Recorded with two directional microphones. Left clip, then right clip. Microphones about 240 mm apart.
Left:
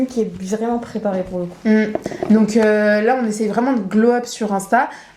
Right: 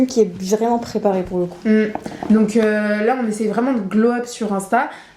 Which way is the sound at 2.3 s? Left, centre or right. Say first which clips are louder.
Left 2 dB; left.